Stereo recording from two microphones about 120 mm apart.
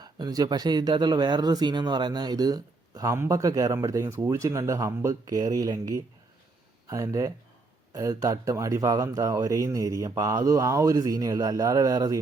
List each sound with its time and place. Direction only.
0.0 s speech: 35° right (ahead or behind)